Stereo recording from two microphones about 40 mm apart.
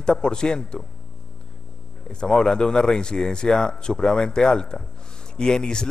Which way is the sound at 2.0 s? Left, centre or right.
Left.